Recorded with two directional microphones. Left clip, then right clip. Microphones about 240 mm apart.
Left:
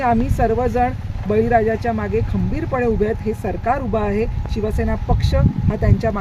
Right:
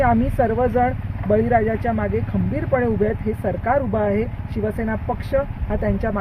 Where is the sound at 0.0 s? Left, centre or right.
Centre.